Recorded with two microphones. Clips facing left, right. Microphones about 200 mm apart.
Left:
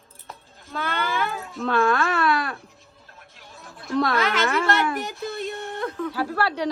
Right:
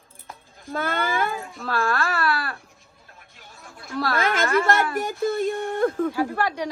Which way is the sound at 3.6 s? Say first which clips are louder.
Left 4 dB; centre (ahead or behind).